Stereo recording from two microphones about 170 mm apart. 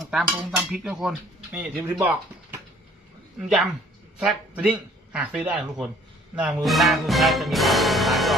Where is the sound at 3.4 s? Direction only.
Centre (ahead or behind).